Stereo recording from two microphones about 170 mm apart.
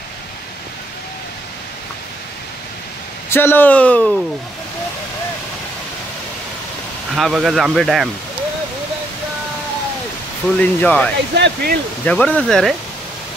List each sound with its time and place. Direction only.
3.3 s speech: 15° left (ahead or behind)
7.2 s speech: centre (ahead or behind)
10.6 s speech: 10° left (ahead or behind)
11.3 s speech: 85° right
12.0 s speech: 5° left (ahead or behind)